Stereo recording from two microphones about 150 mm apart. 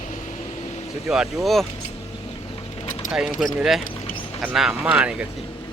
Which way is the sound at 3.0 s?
5° right (ahead or behind).